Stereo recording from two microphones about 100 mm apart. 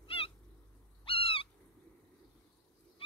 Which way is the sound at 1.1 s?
65° left (ahead or behind).